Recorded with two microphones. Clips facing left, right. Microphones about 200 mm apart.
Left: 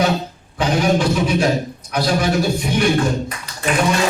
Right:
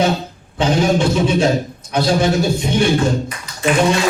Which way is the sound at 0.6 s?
25° right (ahead or behind).